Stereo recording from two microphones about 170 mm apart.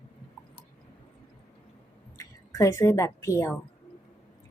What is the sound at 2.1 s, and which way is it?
A woman's voice, 20° left (ahead or behind).